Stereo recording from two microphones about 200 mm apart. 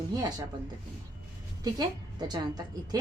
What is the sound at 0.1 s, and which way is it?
Speech, 20° right (ahead or behind).